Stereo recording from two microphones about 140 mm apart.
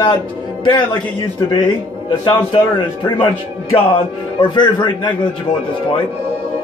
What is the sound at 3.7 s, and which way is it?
A man's voice, 35° left (ahead or behind).